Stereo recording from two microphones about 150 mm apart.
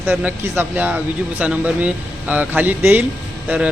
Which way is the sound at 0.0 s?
10° right (ahead or behind).